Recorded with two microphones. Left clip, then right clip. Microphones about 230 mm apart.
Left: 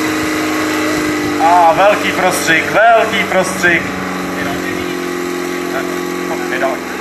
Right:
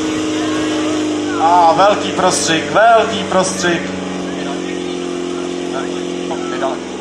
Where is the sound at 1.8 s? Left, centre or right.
Left.